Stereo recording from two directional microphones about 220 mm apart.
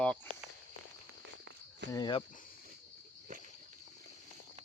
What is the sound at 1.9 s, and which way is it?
Speech, 20° left (ahead or behind).